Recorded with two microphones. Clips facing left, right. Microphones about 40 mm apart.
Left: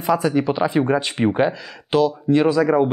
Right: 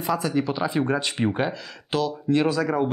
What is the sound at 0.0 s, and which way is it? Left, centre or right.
Speech, left.